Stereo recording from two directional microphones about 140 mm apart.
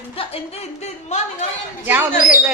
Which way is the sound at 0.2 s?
45° left (ahead or behind).